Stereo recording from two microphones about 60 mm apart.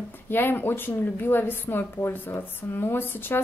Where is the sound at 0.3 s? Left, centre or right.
Left.